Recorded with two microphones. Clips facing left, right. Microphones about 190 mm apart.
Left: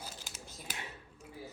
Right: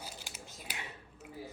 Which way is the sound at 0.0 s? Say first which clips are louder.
Right 1 dB; 10° right (ahead or behind).